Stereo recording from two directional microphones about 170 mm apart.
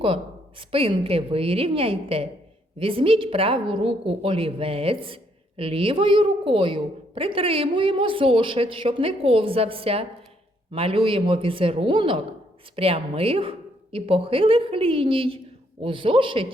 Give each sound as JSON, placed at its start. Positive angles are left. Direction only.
{"t": 0.7, "sound": "a woman's voice", "side_deg": -35}